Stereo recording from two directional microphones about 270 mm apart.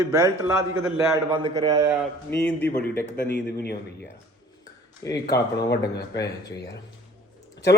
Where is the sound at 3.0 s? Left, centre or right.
Left.